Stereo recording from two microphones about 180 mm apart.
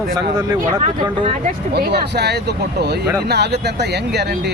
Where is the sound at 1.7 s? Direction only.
65° right (ahead or behind).